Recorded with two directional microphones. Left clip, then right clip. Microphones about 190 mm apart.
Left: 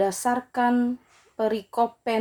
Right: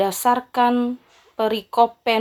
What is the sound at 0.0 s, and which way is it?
Speech, 10° right (ahead or behind).